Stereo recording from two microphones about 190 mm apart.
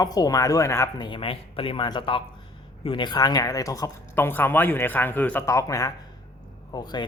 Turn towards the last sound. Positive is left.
turn(degrees=20)  # may be behind; listen again after turning